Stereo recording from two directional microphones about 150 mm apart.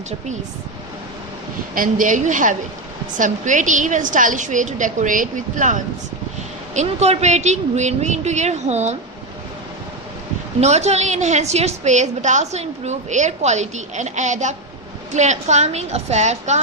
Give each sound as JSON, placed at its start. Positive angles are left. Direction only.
{"t": 1.7, "sound": "a woman's voice", "side_deg": -65}
{"t": 10.6, "sound": "a woman's voice", "side_deg": -50}